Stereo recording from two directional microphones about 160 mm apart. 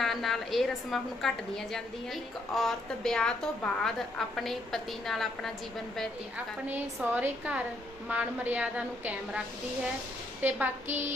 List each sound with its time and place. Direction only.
0.0 s a woman's voice: centre (ahead or behind)
6.3 s a woman's voice: 10° right (ahead or behind)
10.4 s a woman's voice: 10° right (ahead or behind)